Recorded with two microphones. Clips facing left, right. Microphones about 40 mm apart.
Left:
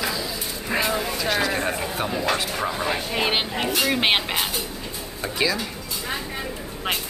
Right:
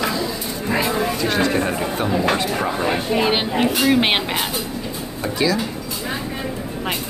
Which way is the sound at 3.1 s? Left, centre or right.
Centre.